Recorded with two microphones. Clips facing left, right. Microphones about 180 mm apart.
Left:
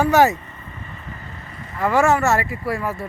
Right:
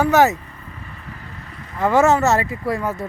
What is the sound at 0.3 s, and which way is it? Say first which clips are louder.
Vehicle: even; centre (ahead or behind).